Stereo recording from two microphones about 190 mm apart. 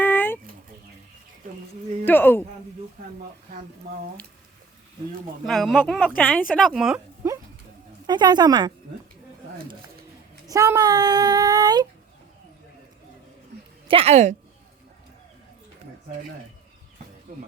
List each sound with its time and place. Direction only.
0.0 s a sound: 10° left (ahead or behind)
2.0 s speech: 10° left (ahead or behind)
5.5 s speech: centre (ahead or behind)
7.2 s a sound: 15° right (ahead or behind)
8.0 s speech: 20° right (ahead or behind)
10.4 s speech: 15° right (ahead or behind)
13.8 s a woman's voice: 30° right (ahead or behind)